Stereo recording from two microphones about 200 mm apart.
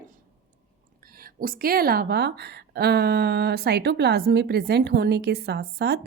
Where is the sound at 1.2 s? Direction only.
45° right (ahead or behind).